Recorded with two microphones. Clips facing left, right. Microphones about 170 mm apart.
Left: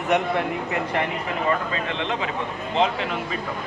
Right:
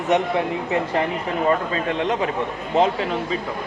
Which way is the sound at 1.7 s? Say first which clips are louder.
Right 4 dB; 45° right (ahead or behind).